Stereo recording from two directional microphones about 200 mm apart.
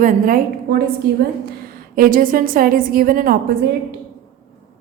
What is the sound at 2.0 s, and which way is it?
A woman's voice, 45° right (ahead or behind).